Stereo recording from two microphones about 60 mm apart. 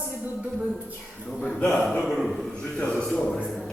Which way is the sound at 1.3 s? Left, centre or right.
Centre.